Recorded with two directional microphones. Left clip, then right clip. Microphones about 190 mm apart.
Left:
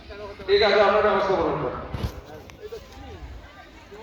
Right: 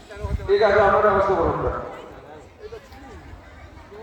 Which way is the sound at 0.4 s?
45° right (ahead or behind).